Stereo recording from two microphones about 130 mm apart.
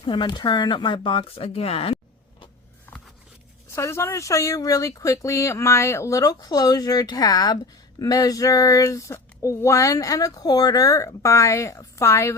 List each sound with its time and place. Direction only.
0.0 s speech: 35° left (ahead or behind)
3.7 s speech: 20° left (ahead or behind)